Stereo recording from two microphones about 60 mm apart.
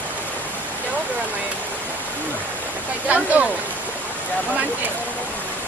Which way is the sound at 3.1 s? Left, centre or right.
Right.